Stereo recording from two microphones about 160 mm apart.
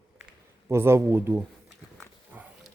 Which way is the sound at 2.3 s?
10° right (ahead or behind).